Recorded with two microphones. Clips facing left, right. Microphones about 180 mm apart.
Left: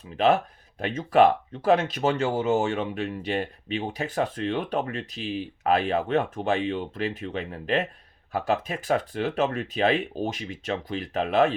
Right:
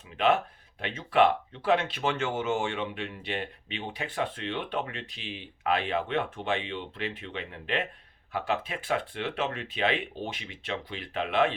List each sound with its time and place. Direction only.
0.8 s speech: 45° left (ahead or behind)